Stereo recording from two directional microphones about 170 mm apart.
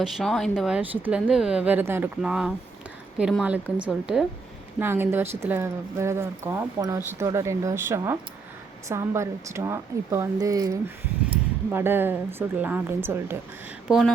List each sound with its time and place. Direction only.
0.0 s speech: centre (ahead or behind)
13.8 s speech: 5° right (ahead or behind)